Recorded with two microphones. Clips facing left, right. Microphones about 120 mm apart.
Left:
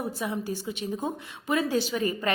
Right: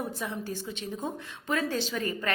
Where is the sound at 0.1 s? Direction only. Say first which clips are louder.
Left 4 dB; 10° left (ahead or behind).